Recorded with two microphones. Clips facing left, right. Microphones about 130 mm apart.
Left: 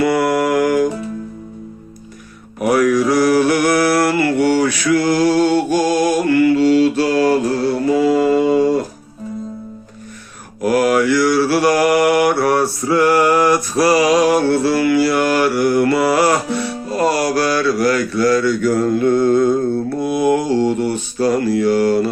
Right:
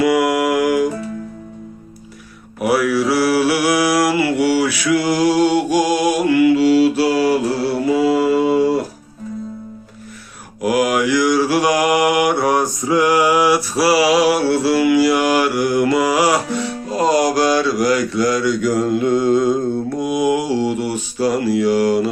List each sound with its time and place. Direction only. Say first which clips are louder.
0.0 s mantra: even; 10° right (ahead or behind)
2.6 s mantra: left 2 dB; 5° right (ahead or behind)
10.6 s mantra: left 2 dB; 10° right (ahead or behind)